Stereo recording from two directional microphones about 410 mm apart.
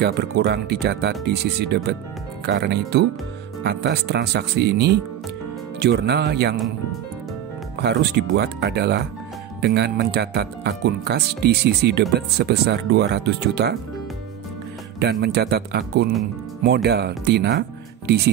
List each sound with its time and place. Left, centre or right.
0.0 s speech: right
7.8 s speech: right
15.0 s speech: right